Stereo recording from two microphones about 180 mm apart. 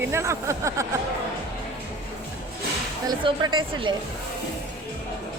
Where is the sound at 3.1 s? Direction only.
25° right (ahead or behind).